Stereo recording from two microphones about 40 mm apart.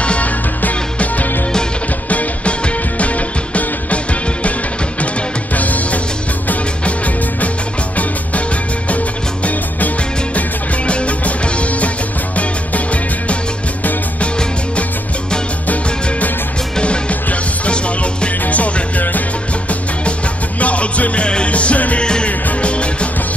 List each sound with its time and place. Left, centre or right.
0.0 s music: left
0.9 s music: left
8.8 s music: left
10.9 s music: left
16.8 s music: left
18.4 s music: left
20.6 s music: left
22.0 s music: left